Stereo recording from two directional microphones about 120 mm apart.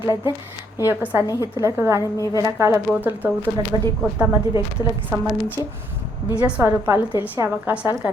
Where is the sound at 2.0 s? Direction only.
30° left (ahead or behind).